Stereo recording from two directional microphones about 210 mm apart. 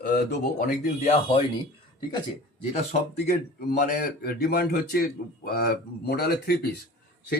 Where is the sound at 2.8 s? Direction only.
30° left (ahead or behind); by 6.5 s 50° left (ahead or behind).